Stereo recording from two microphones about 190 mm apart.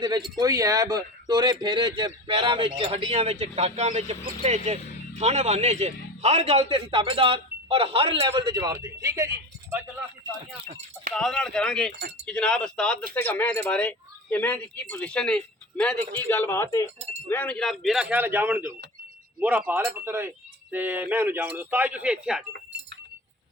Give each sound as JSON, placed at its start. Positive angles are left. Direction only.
{"t": 0.3, "sound": "a man's voice", "side_deg": -20}
{"t": 11.1, "sound": "speech", "side_deg": 5}
{"t": 17.0, "sound": "speech", "side_deg": -35}
{"t": 17.2, "sound": "speech", "side_deg": 10}
{"t": 22.5, "sound": "keys jangling", "side_deg": -65}